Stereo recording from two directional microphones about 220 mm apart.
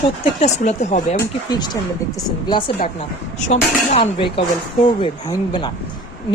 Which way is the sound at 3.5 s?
30° left (ahead or behind).